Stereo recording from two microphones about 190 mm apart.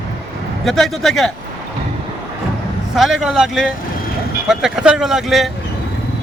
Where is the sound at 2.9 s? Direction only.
Centre (ahead or behind).